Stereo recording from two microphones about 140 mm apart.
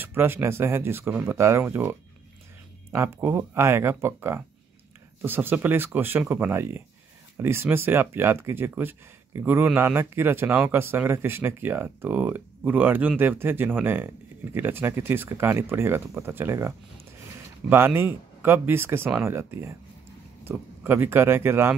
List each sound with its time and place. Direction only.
0.0 s speech: 15° right (ahead or behind)